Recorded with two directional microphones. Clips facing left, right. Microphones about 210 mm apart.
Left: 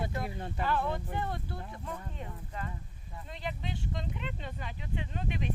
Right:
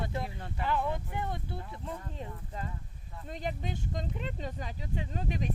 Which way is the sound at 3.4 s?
45° right (ahead or behind).